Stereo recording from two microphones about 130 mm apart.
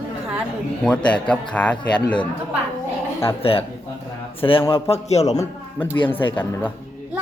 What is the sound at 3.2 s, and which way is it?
A man's voice, 45° left (ahead or behind).